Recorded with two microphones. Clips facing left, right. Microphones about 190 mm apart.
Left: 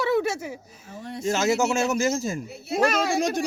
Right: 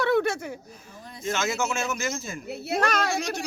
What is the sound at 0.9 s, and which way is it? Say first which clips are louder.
Speech: left 11 dB; 75° left (ahead or behind).